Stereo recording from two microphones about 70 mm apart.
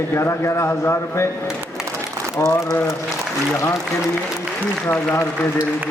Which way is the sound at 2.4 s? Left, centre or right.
Left.